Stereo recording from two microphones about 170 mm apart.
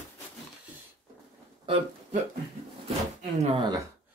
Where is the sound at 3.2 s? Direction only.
40° right (ahead or behind).